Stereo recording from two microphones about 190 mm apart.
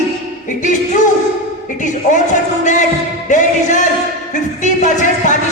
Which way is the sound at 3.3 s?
40° left (ahead or behind).